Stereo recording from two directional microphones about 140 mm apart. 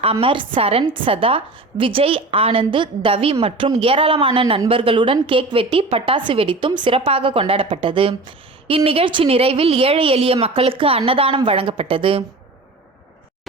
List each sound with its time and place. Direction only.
0.0 s a woman's voice: 40° right (ahead or behind)